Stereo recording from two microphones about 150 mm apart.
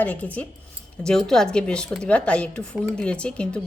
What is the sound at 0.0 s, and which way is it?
Speech, 10° left (ahead or behind).